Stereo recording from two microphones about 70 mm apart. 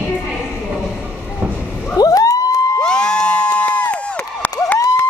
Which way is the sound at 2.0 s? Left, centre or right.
Left.